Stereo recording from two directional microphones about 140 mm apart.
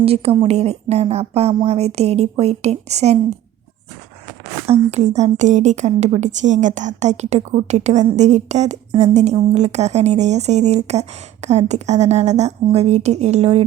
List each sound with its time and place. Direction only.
0.0 s speech: 45° right (ahead or behind)
4.6 s a woman's voice: 50° right (ahead or behind)